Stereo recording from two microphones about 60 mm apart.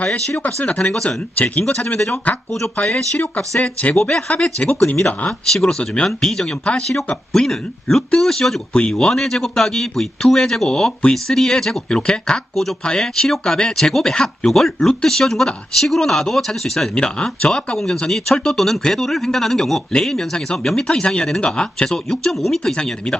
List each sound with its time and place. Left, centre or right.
0.0 s speech: left
0.9 s speech: centre
1.4 s speech: left
1.6 s speech: centre
3.9 s speech: centre
16.9 s speech: centre
22.7 s speech: centre